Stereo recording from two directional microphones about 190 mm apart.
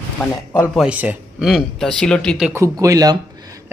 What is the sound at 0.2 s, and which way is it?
Speech, 5° left (ahead or behind).